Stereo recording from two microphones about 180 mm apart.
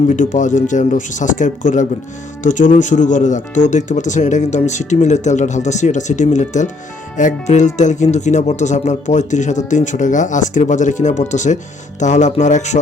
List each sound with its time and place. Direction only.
0.2 s speech: 45° left (ahead or behind)